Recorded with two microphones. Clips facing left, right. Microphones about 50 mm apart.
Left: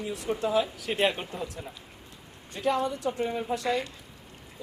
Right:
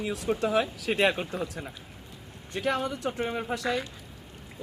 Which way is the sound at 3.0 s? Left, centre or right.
Right.